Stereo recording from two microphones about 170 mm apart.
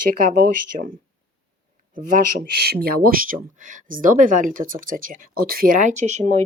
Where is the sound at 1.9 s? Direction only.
60° right (ahead or behind); by 6.4 s 40° right (ahead or behind).